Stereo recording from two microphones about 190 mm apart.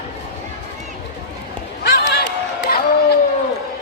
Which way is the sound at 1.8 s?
65° left (ahead or behind).